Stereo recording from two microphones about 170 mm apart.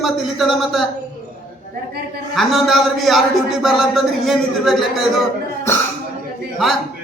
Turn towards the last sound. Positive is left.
turn(degrees=0)  # may be behind; listen again after turning